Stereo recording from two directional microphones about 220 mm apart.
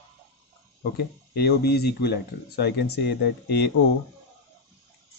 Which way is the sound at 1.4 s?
45° left (ahead or behind).